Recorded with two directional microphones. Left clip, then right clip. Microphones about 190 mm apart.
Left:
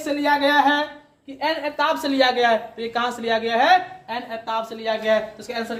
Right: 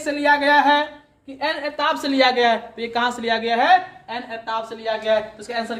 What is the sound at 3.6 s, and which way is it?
Speech, 5° right (ahead or behind).